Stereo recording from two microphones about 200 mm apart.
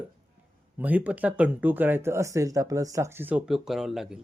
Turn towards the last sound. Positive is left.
turn(degrees=0)  # may be behind; listen again after turning